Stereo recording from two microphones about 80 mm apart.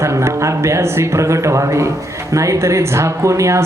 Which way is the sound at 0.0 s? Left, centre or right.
Right.